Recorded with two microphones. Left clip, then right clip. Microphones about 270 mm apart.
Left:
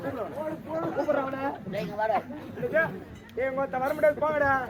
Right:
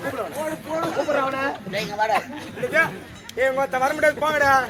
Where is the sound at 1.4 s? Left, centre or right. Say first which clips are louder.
Right 6 dB; centre.